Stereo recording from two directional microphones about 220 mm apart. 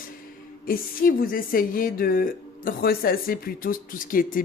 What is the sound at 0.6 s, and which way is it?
A woman's voice, 40° left (ahead or behind).